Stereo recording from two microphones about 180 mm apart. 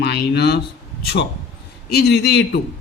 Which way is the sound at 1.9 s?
65° left (ahead or behind).